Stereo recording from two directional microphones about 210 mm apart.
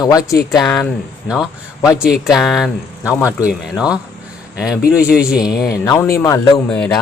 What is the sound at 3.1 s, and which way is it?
Speech, 10° left (ahead or behind).